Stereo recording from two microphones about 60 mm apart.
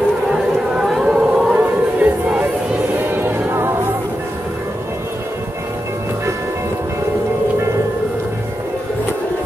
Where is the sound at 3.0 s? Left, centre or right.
Right.